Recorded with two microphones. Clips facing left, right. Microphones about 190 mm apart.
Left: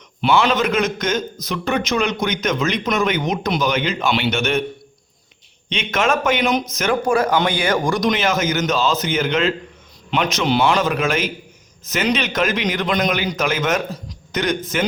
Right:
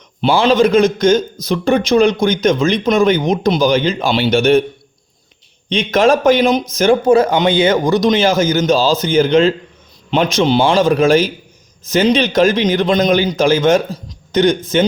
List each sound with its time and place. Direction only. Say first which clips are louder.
0.2 s speech: right 6 dB; 30° right (ahead or behind)
5.6 s speech: right 8 dB; 35° right (ahead or behind)